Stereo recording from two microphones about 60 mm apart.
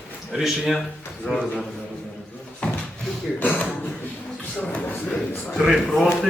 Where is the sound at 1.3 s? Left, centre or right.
Centre.